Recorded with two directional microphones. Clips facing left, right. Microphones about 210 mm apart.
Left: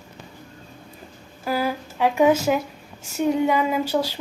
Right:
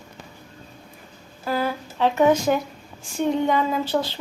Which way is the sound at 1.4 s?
10° left (ahead or behind).